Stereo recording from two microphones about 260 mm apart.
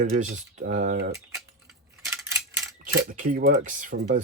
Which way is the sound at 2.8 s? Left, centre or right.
Right.